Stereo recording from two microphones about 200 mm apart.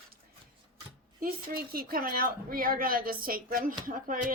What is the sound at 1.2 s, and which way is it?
A woman's voice, 50° right (ahead or behind).